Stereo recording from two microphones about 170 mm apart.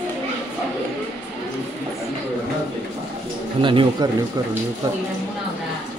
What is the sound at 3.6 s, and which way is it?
Speech, 30° right (ahead or behind).